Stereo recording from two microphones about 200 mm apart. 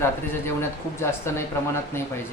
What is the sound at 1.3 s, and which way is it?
Speech, 15° left (ahead or behind).